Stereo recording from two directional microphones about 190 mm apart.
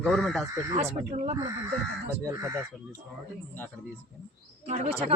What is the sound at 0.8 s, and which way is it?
Speech, 35° right (ahead or behind).